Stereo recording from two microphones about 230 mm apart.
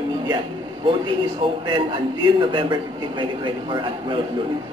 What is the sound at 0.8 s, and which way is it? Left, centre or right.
A man's voice, right.